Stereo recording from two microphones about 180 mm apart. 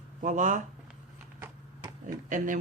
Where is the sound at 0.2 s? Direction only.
45° right (ahead or behind).